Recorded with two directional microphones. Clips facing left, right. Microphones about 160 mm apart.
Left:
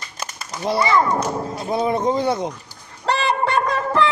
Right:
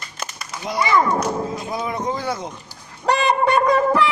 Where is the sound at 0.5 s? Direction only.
35° left (ahead or behind).